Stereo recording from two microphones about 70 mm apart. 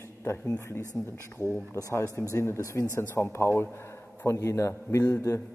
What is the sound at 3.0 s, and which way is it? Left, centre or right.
A man's voice, left.